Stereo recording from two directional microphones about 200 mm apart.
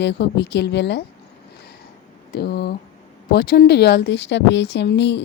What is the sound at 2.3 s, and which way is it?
Speech, 55° left (ahead or behind).